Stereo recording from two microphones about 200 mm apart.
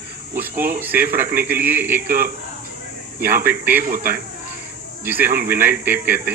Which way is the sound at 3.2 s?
10° right (ahead or behind).